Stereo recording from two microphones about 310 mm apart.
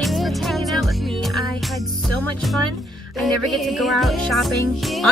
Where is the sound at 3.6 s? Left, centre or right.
Centre.